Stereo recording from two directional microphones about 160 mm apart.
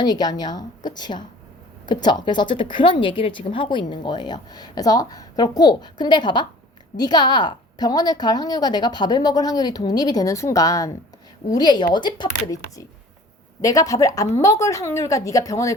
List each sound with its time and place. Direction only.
0.0 s speech: 25° left (ahead or behind)